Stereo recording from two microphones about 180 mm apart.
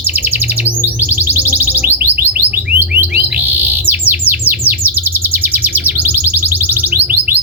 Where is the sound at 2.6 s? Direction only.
10° right (ahead or behind).